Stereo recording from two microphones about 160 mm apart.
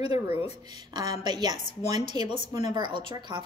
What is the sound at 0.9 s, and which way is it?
A woman's voice, 25° right (ahead or behind).